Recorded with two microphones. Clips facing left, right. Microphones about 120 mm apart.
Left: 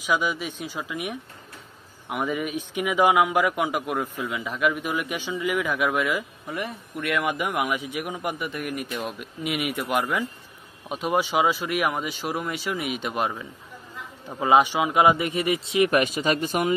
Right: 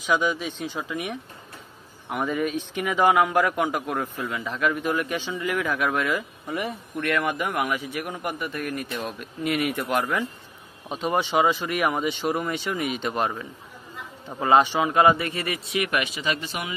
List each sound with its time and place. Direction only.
0.0 s speech: 10° left (ahead or behind)
6.4 s speech: centre (ahead or behind)
7.0 s speech: 10° left (ahead or behind)
15.9 s speech: 45° left (ahead or behind)